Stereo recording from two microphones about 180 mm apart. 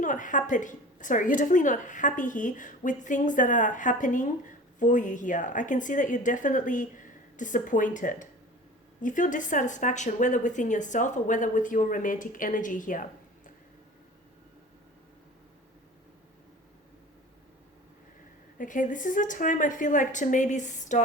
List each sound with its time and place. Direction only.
0.0 s a woman's voice: 45° left (ahead or behind)
18.5 s a woman's voice: 45° left (ahead or behind)